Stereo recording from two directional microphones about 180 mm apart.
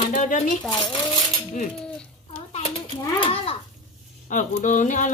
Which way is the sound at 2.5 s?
35° left (ahead or behind).